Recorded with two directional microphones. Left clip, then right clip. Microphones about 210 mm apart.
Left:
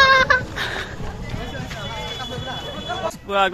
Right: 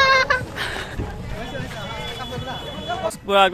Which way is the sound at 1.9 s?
40° right (ahead or behind).